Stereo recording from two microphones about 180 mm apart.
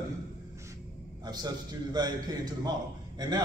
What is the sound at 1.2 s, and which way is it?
A man's voice, 20° right (ahead or behind).